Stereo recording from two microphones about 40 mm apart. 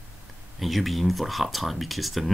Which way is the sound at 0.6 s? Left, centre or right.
Centre.